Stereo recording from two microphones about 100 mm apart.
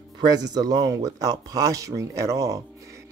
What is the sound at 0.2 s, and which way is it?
Speech, 40° right (ahead or behind).